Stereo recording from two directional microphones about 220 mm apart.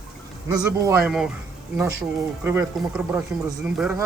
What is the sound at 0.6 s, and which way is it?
Speech, 15° right (ahead or behind).